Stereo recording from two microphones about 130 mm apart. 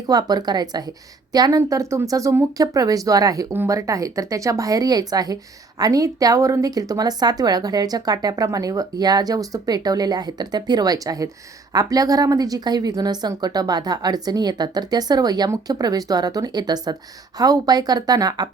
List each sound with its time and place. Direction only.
0.1 s a woman's voice: 30° right (ahead or behind)